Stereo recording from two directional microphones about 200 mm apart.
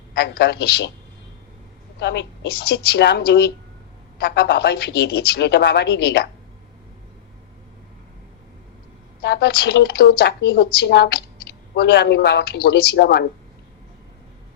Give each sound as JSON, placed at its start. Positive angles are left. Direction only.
{"t": 0.1, "sound": "speech", "side_deg": 55}
{"t": 2.0, "sound": "a woman's voice", "side_deg": 65}
{"t": 9.2, "sound": "speech", "side_deg": 55}